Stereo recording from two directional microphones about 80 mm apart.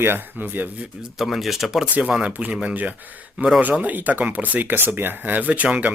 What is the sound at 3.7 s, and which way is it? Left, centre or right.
Speech, centre.